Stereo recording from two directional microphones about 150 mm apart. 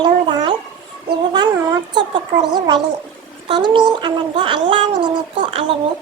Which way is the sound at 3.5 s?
30° right (ahead or behind).